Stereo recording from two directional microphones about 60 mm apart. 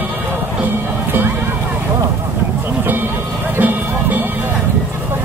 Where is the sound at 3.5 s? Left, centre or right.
Right.